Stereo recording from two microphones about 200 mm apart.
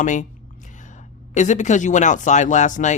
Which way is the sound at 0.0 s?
40° left (ahead or behind).